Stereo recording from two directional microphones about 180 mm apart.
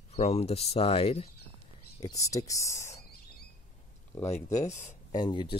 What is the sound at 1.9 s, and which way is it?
Speech, 20° left (ahead or behind).